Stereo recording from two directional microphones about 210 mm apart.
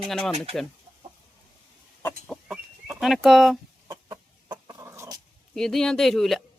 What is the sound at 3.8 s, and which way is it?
Chicken, 20° right (ahead or behind).